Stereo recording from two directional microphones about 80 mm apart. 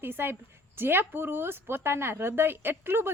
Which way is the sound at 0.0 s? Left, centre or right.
Right.